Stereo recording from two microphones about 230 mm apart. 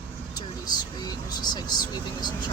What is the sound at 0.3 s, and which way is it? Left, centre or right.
Speech, centre.